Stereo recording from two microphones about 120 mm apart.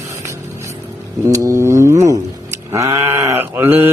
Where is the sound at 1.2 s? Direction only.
25° right (ahead or behind).